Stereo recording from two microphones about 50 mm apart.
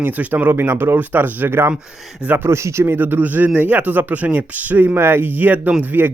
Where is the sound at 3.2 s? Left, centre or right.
Right.